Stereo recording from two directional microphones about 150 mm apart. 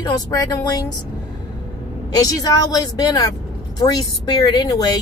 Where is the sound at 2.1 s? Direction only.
25° left (ahead or behind).